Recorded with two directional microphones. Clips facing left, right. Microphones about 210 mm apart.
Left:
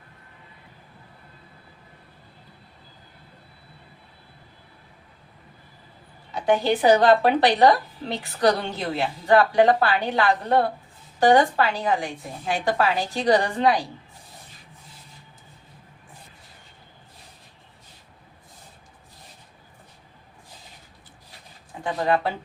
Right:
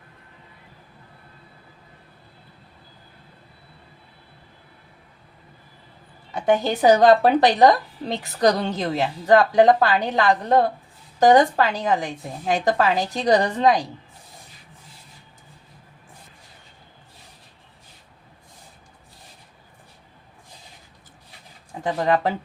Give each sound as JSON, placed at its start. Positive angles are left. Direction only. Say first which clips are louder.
{"t": 6.4, "sound": "a woman's voice", "louder": "right 1 dB", "side_deg": -45}
{"t": 21.8, "sound": "a woman's voice", "louder": "right 2 dB", "side_deg": -40}